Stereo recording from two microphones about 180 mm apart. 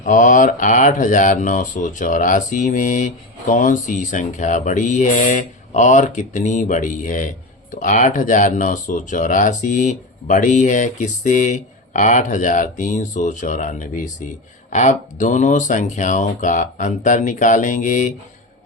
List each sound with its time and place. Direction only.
0.0 s speech: 45° left (ahead or behind)